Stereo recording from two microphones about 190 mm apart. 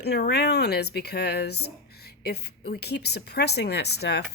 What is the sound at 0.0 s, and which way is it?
A woman's voice, 60° left (ahead or behind).